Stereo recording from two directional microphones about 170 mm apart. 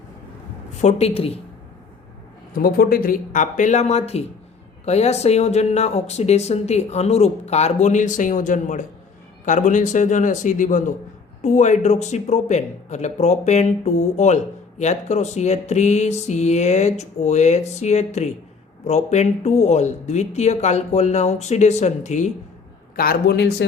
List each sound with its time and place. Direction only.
0.8 s speech: 40° left (ahead or behind)
2.5 s speech: 60° left (ahead or behind)
23.0 s a man's voice: 65° left (ahead or behind)